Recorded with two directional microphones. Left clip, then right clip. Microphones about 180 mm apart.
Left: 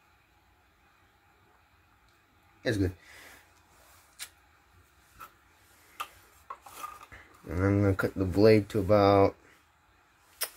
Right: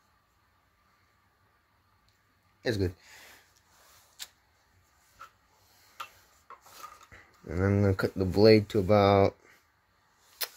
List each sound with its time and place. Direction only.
2.6 s speech: 55° right (ahead or behind)
7.1 s speech: 40° right (ahead or behind)